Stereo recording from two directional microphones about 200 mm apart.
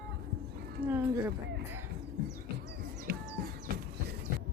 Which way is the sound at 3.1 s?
50° right (ahead or behind).